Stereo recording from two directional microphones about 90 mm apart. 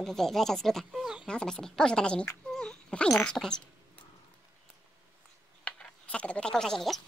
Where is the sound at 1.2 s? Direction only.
10° left (ahead or behind).